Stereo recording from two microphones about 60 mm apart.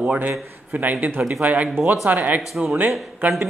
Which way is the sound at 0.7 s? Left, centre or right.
Right.